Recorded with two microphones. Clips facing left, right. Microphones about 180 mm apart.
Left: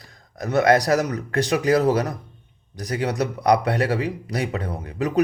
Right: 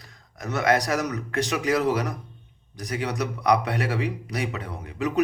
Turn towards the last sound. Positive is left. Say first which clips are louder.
# left 3 dB
turn(degrees=35)  # may be behind; listen again after turning